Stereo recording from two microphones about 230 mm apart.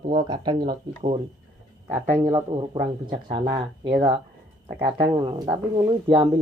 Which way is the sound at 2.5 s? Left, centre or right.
Right.